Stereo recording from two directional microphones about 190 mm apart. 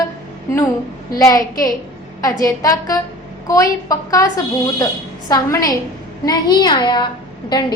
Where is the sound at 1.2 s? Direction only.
20° left (ahead or behind).